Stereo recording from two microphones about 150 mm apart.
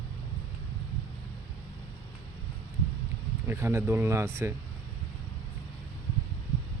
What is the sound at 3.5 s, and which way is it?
Speech, 15° right (ahead or behind).